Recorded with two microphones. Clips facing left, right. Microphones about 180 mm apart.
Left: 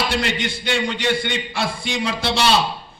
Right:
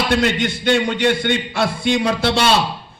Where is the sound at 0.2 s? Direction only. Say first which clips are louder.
Right 5 dB; 55° right (ahead or behind).